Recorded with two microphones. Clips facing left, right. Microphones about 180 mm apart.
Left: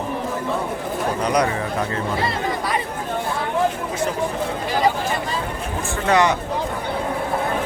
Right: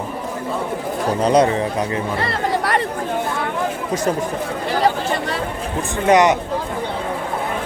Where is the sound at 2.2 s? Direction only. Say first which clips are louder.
Right 3 dB; 75° right (ahead or behind).